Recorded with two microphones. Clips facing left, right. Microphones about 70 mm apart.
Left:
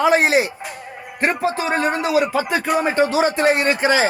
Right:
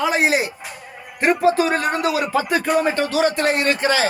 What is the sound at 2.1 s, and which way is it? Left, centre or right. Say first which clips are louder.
Speech: left 2 dB; centre.